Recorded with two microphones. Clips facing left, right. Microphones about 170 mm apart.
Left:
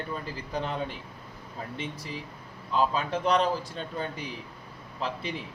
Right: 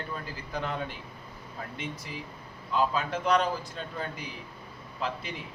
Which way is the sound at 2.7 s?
30° left (ahead or behind).